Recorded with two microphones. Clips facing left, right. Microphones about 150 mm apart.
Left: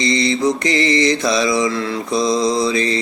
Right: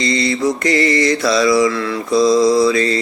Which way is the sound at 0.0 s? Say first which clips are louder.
Even; 20° left (ahead or behind).